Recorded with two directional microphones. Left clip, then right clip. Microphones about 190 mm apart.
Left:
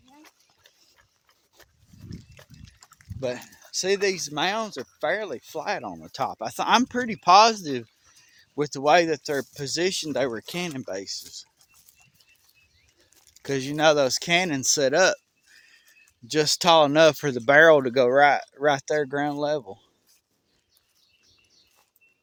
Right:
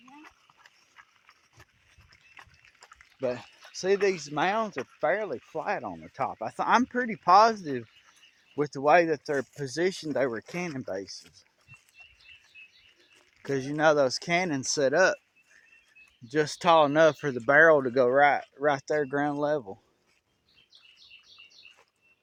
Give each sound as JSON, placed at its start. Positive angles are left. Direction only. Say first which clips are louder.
{"t": 0.1, "sound": "a sound", "louder": "right 1 dB", "side_deg": -30}
{"t": 2.3, "sound": "livestock", "louder": "even", "side_deg": -50}
{"t": 3.2, "sound": "speech", "louder": "left 1 dB", "side_deg": 35}
{"t": 13.3, "sound": "speech", "louder": "left 3 dB", "side_deg": 45}
{"t": 16.3, "sound": "speech", "louder": "left 4 dB", "side_deg": 60}